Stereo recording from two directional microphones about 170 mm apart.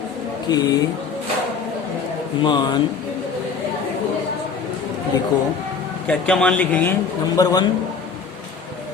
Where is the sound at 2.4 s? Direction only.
25° left (ahead or behind).